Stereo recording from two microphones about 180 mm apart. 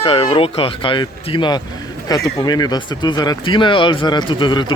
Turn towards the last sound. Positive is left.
turn(degrees=25)  # may be behind; listen again after turning